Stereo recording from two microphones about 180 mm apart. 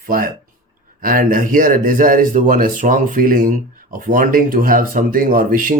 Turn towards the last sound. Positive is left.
turn(degrees=-50)  # may be behind; listen again after turning